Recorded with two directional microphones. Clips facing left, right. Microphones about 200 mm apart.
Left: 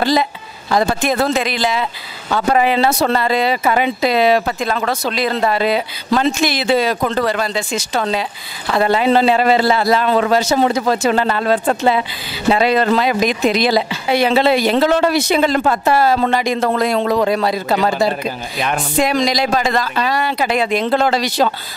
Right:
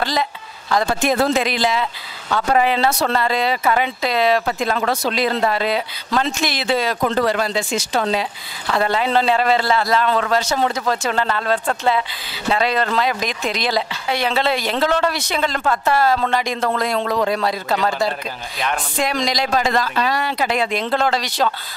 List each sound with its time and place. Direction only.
0.0 s a sound: 10° left (ahead or behind)
2.3 s speech: 10° left (ahead or behind)
8.6 s speech: 10° left (ahead or behind)